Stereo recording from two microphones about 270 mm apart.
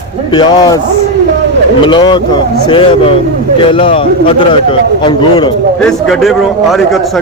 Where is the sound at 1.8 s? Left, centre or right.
Centre.